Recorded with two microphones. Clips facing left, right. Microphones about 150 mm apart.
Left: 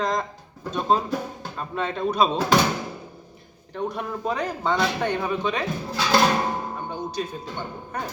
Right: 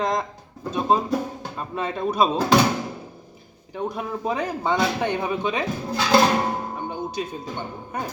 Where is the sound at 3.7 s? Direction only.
5° right (ahead or behind).